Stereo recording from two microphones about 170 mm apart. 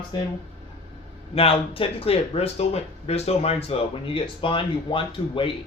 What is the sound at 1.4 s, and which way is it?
Speech, 35° left (ahead or behind).